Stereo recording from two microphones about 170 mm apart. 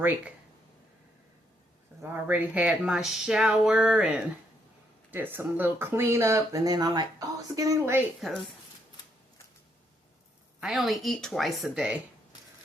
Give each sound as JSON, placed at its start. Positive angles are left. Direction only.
{"t": 2.0, "sound": "speech", "side_deg": -10}
{"t": 10.6, "sound": "speech", "side_deg": 0}